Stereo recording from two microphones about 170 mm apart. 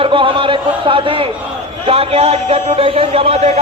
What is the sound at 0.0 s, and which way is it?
A man's voice, 30° right (ahead or behind).